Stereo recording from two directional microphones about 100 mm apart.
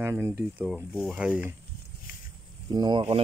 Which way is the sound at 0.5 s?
15° right (ahead or behind).